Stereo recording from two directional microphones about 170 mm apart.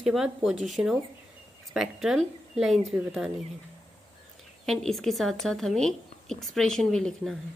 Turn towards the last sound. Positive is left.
turn(degrees=5)  # may be behind; listen again after turning